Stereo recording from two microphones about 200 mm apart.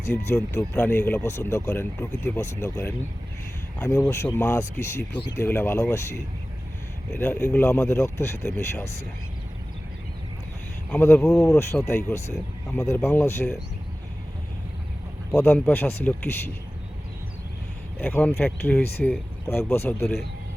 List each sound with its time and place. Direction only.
0.7 s speech: 10° left (ahead or behind)
10.9 s speech: 10° left (ahead or behind)
15.3 s speech: 10° left (ahead or behind)
18.0 s speech: 5° left (ahead or behind)